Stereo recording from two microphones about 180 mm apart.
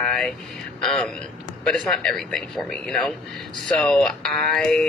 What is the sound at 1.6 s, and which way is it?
Speech, 5° left (ahead or behind).